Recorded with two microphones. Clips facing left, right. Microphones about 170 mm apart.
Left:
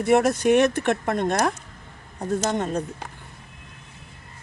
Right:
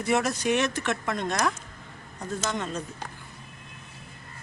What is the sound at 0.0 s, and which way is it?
Speech, 55° left (ahead or behind).